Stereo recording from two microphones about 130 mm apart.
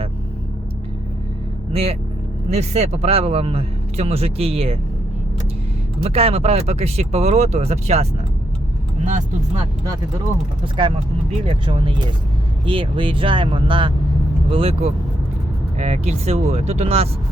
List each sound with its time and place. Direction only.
1.7 s speech: 50° right (ahead or behind)
6.0 s speech: 50° right (ahead or behind)
10.6 s speech: 40° right (ahead or behind)